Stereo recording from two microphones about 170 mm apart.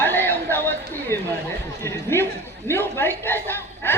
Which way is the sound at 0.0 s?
10° left (ahead or behind).